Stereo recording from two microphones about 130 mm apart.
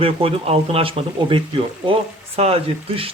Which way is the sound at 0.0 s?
45° right (ahead or behind).